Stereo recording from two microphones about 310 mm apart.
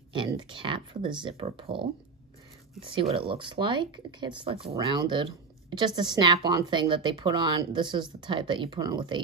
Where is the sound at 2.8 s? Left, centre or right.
Centre.